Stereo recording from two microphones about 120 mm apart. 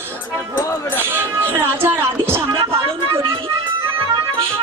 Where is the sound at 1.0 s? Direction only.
15° right (ahead or behind).